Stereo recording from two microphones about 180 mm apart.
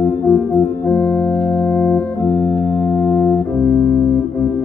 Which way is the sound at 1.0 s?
Centre (ahead or behind).